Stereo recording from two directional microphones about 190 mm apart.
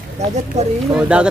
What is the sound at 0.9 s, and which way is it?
Speech, 5° right (ahead or behind).